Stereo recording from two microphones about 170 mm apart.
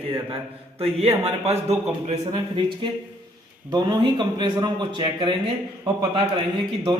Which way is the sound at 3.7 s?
25° right (ahead or behind).